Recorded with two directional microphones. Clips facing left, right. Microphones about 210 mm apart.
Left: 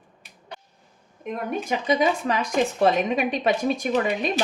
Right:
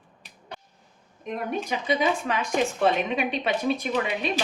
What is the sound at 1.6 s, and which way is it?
A woman's voice, 40° left (ahead or behind).